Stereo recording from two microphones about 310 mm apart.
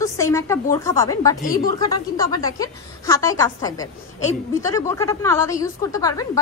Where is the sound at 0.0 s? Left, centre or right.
Centre.